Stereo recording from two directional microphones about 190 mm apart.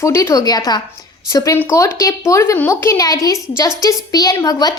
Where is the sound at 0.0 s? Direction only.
15° left (ahead or behind).